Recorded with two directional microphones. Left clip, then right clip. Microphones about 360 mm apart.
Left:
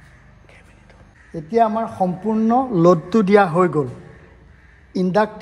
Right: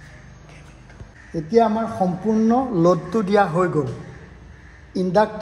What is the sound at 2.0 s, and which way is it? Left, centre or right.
Speech, left.